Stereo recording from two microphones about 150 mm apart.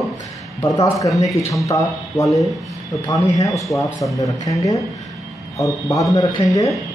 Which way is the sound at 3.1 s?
25° left (ahead or behind).